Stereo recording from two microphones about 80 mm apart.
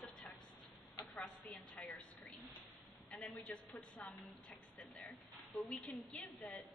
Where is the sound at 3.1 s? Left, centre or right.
Centre.